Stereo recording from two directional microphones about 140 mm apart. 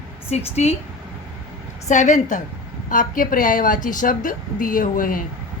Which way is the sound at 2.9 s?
75° left (ahead or behind).